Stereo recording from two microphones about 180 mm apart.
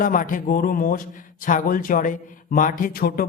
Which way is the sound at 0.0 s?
50° left (ahead or behind).